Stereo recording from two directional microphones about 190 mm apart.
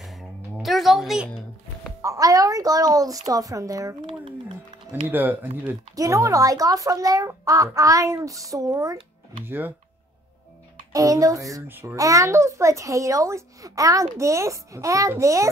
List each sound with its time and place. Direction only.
0.0 s music: centre (ahead or behind)
2.0 s a child's voice: 15° right (ahead or behind)
5.1 s a child's voice: 10° right (ahead or behind)
10.9 s a child's voice: 20° right (ahead or behind)